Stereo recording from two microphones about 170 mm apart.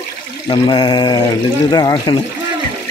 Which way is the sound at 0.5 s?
25° left (ahead or behind).